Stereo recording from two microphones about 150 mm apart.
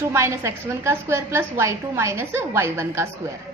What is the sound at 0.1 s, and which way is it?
A woman's voice, 20° right (ahead or behind).